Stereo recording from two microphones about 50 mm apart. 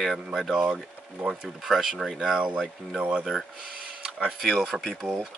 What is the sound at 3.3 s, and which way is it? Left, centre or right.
Speech, centre.